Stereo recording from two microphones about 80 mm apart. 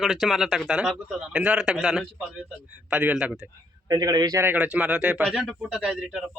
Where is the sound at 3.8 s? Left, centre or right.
Right.